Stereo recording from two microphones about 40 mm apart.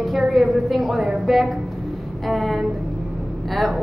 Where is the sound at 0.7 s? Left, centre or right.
Right.